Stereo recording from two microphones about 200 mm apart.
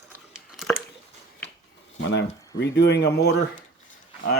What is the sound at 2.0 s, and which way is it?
Speech, 60° left (ahead or behind).